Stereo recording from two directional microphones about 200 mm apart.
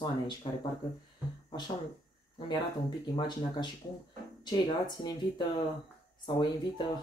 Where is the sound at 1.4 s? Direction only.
25° left (ahead or behind).